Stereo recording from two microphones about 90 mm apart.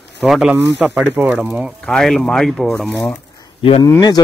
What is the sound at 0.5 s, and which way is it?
Speech, 15° right (ahead or behind).